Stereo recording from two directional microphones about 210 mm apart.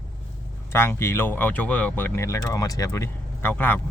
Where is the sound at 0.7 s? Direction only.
10° left (ahead or behind).